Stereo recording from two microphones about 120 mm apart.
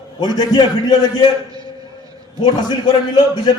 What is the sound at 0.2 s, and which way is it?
A man's voice, 35° left (ahead or behind).